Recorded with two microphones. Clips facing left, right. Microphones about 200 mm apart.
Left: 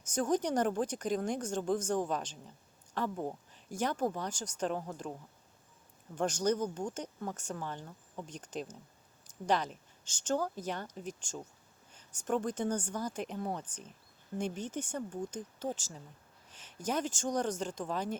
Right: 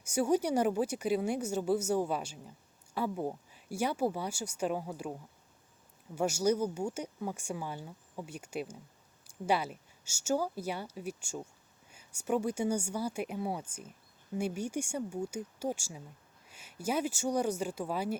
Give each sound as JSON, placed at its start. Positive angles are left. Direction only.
{"t": 0.0, "sound": "speech", "side_deg": -10}
{"t": 6.1, "sound": "speech", "side_deg": -10}